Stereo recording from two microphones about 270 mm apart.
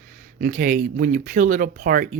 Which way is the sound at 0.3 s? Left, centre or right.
Right.